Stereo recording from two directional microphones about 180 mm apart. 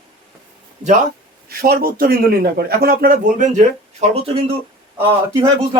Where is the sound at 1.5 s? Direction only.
60° right (ahead or behind); by 3.7 s 40° right (ahead or behind).